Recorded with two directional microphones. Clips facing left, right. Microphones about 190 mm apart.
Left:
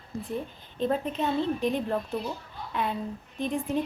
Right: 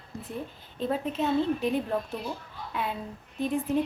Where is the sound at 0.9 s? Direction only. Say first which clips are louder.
Right 2 dB; 5° right (ahead or behind).